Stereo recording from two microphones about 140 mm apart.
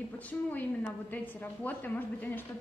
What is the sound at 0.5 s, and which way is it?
A woman's voice, 10° left (ahead or behind).